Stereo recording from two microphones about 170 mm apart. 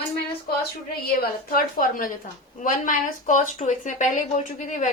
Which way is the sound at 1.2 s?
60° left (ahead or behind).